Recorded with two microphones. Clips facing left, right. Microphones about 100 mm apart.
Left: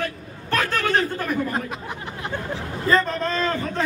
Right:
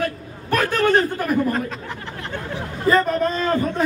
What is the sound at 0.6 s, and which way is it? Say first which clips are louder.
Speech: right 5 dB; 40° right (ahead or behind).